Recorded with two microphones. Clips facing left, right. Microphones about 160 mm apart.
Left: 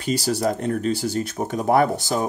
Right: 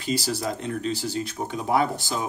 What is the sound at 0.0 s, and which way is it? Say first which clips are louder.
Speech: left 5 dB; 55° left (ahead or behind).